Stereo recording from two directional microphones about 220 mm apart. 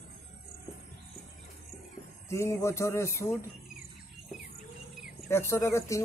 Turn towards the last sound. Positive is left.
turn(degrees=15)  # may be behind; listen again after turning